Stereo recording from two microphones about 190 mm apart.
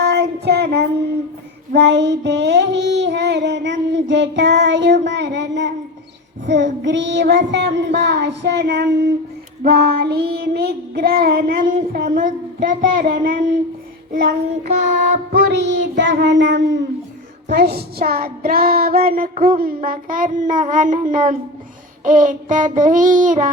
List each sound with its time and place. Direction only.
0.0 s child singing: 60° right (ahead or behind)
17.5 s child singing: 60° right (ahead or behind)